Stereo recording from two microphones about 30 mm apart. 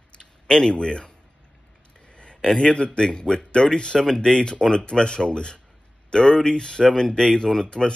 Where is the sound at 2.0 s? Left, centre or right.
Left.